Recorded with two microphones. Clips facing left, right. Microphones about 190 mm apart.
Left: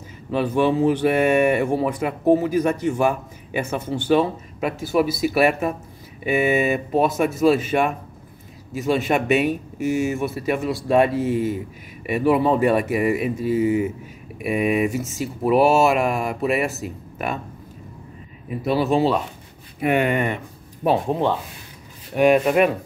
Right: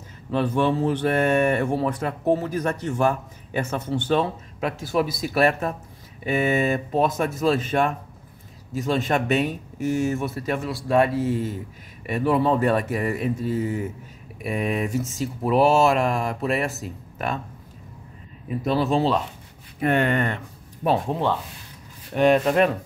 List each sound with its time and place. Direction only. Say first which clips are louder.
0.3 s speech: left 2 dB; 10° left (ahead or behind)
10.7 s speech: left 2 dB; 20° left (ahead or behind)
18.7 s speech: left 2 dB; 10° left (ahead or behind)